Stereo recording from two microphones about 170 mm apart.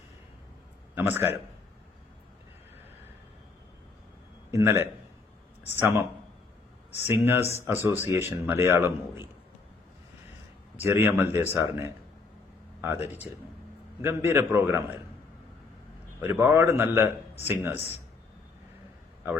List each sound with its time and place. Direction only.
0.9 s a man's voice: 10° right (ahead or behind)
4.5 s a man's voice: 15° right (ahead or behind)
7.1 s a man's voice: 15° right (ahead or behind)
10.8 s a man's voice: 15° right (ahead or behind)
16.2 s a man's voice: 15° right (ahead or behind)